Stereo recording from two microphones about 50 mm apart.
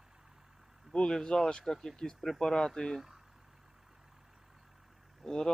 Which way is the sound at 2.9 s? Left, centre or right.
Centre.